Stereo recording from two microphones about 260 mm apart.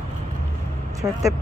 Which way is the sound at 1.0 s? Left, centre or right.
Centre.